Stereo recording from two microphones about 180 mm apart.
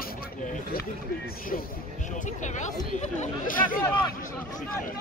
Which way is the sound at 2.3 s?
40° left (ahead or behind).